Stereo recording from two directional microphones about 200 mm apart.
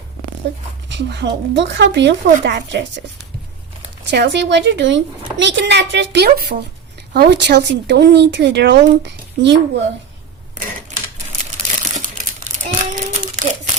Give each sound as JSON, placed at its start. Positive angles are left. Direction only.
{"t": 0.5, "sound": "speech", "side_deg": -60}
{"t": 4.1, "sound": "speech", "side_deg": -60}
{"t": 11.9, "sound": "crumpling", "side_deg": -40}